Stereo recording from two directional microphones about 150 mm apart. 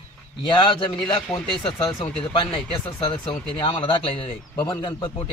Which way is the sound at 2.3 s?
30° left (ahead or behind).